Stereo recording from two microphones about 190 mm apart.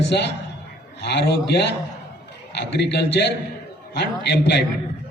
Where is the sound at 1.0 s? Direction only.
60° left (ahead or behind).